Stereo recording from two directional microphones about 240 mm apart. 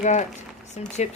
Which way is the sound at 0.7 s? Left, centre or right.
Left.